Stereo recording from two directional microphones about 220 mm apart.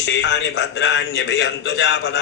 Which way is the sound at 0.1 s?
55° left (ahead or behind).